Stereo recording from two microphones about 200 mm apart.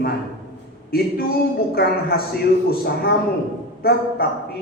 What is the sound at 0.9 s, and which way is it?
A man's voice, 50° left (ahead or behind).